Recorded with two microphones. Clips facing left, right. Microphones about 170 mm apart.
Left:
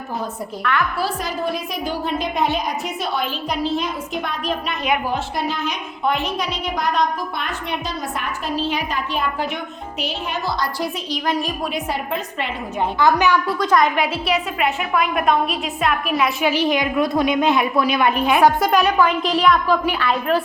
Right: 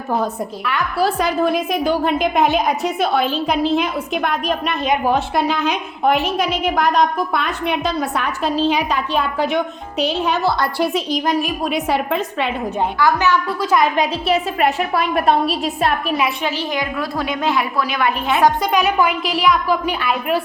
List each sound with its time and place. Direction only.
1.2 s a woman's voice: 60° right (ahead or behind)
5.1 s a woman's voice: 80° right
6.0 s a woman's voice: 50° right (ahead or behind)
8.7 s a woman's voice: 75° right (ahead or behind)
10.2 s a woman's voice: 65° right (ahead or behind)
11.7 s a woman's voice: 75° right (ahead or behind)
13.0 s a woman's voice: 20° left (ahead or behind)
13.5 s a child's voice: 5° right (ahead or behind)
13.8 s a woman's voice: 20° right (ahead or behind)
16.4 s a woman's voice: 15° left (ahead or behind); by 20.4 s 10° right (ahead or behind)